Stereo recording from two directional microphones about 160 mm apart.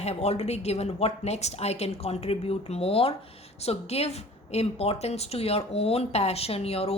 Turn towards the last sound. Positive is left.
turn(degrees=40)  # may be behind; listen again after turning